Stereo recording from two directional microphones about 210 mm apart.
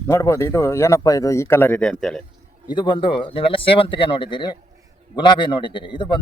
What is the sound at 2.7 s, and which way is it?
Speech, 25° left (ahead or behind).